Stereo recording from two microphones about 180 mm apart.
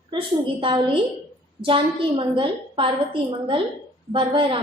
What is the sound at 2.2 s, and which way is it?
Speech, 30° right (ahead or behind).